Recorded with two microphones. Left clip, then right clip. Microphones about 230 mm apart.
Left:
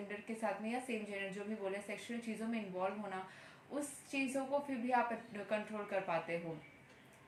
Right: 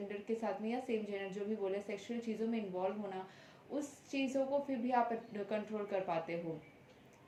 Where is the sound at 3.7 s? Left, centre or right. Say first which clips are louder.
Right 1 dB; centre.